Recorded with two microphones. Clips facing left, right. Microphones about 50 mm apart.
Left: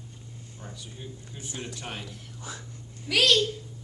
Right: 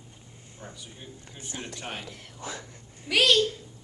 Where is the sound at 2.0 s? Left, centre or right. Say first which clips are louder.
Right 2 dB; right.